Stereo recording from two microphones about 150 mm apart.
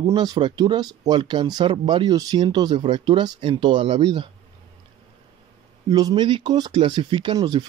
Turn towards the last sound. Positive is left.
turn(degrees=-30)  # may be behind; listen again after turning